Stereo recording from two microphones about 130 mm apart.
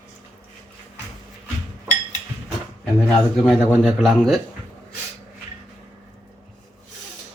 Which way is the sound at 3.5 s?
Centre (ahead or behind).